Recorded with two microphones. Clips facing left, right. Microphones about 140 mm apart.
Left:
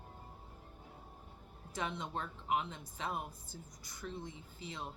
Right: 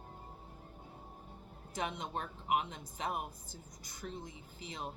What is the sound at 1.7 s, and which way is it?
A woman's voice, 15° right (ahead or behind).